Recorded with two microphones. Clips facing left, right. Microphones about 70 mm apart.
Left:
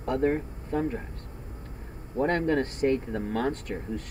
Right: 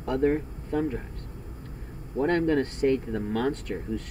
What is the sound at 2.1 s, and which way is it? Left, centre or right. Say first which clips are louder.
Speech: right 1 dB; left.